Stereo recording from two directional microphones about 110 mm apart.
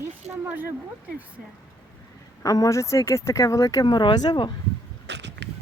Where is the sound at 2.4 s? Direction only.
30° left (ahead or behind).